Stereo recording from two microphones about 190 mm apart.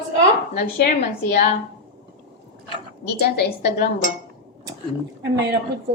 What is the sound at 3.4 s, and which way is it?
Dishes, 55° left (ahead or behind).